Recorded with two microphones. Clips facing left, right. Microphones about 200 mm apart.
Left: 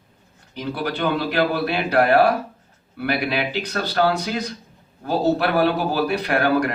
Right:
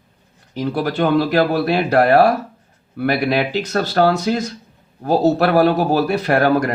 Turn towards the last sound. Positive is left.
turn(degrees=-40)  # may be behind; listen again after turning